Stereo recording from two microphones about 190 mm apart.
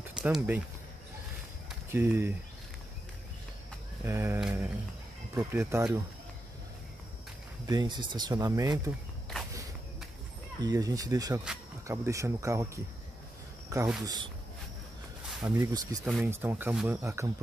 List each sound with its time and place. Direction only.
0.1 s speech: 5° right (ahead or behind)
1.9 s speech: 10° right (ahead or behind)
4.0 s speech: 15° right (ahead or behind)
4.4 s a sound: 5° right (ahead or behind)
5.3 s speech: 15° right (ahead or behind)
7.6 s speech: 20° right (ahead or behind)
10.6 s speech: 20° right (ahead or behind)
15.4 s speech: 15° right (ahead or behind)